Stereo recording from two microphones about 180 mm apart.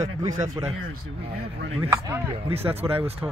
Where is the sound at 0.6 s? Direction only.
25° right (ahead or behind).